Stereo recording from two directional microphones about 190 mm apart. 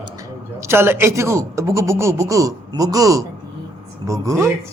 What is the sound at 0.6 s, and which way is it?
Speech, 15° right (ahead or behind).